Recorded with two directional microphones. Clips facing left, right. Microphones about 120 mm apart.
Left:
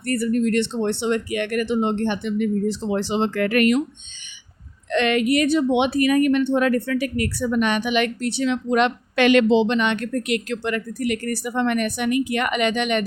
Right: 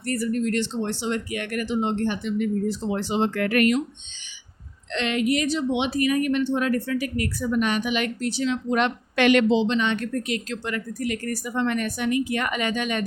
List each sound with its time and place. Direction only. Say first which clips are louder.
0.0 s speech: left 4 dB; 60° left (ahead or behind); by 3.8 s 90° left
4.9 s speech: left 4 dB; 60° left (ahead or behind)